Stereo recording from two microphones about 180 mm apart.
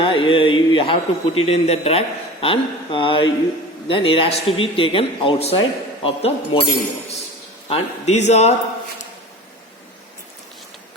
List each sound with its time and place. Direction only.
0.0 s a man's voice: 30° left (ahead or behind)
7.7 s speech: 40° left (ahead or behind)